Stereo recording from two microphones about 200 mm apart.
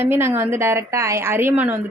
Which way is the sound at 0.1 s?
10° right (ahead or behind).